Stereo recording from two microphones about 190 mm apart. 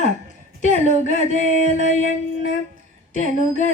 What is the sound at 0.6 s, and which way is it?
Female singing, 40° left (ahead or behind).